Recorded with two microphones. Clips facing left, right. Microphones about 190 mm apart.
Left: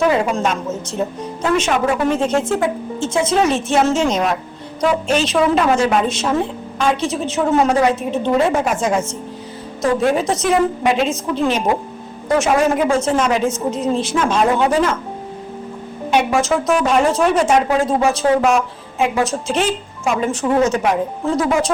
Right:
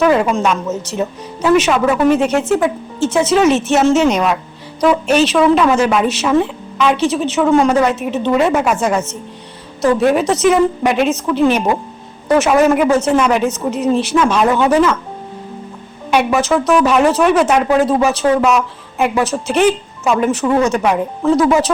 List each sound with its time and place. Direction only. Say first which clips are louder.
0.4 s speech: right 3 dB; 70° right (ahead or behind)
3.1 s speech: right 4 dB; 80° right
3.9 s speech: right 4 dB; 70° right (ahead or behind)
16.0 s a woman's voice: right 2 dB; 65° right (ahead or behind)